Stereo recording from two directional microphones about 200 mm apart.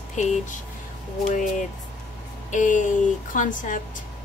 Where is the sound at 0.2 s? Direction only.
35° left (ahead or behind).